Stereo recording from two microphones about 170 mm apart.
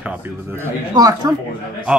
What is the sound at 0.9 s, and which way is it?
Speech, 20° right (ahead or behind).